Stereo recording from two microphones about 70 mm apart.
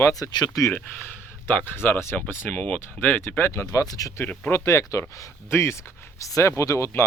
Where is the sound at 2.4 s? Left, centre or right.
Centre.